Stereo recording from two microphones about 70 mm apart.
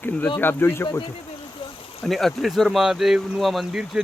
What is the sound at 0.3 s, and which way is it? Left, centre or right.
Speech, left.